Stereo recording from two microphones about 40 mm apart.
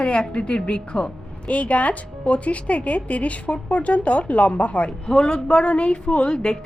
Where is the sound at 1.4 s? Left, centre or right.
Left.